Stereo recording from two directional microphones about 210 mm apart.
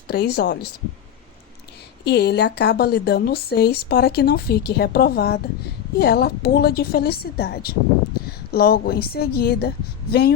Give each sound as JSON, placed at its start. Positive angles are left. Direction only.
{"t": 0.1, "sound": "speech", "side_deg": 50}
{"t": 2.0, "sound": "speech", "side_deg": 50}